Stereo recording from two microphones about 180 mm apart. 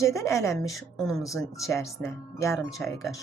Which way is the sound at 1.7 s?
15° left (ahead or behind).